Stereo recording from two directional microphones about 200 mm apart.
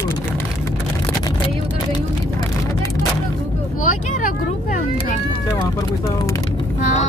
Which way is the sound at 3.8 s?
40° left (ahead or behind).